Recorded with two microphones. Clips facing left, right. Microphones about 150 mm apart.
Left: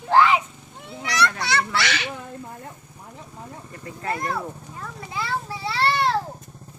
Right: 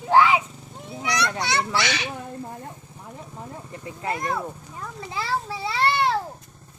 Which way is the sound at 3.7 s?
15° right (ahead or behind).